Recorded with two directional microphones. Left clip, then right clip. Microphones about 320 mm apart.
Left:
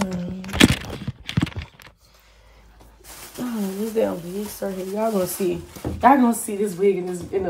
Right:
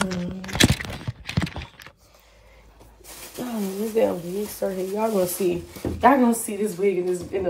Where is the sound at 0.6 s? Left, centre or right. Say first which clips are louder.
Left 3 dB; left.